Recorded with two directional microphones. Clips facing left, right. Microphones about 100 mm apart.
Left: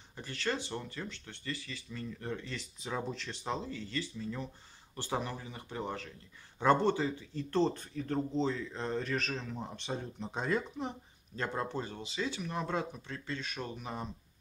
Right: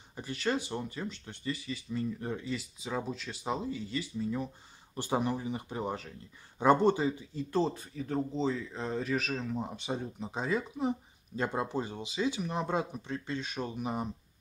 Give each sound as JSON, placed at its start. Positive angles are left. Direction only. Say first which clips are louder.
{"t": 0.1, "sound": "speech", "louder": "right 4 dB", "side_deg": -15}